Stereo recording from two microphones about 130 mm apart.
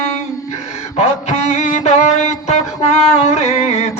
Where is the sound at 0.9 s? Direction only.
60° left (ahead or behind).